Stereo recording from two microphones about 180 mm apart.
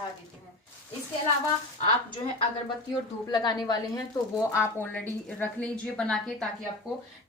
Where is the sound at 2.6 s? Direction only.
25° left (ahead or behind); by 6.5 s 5° left (ahead or behind).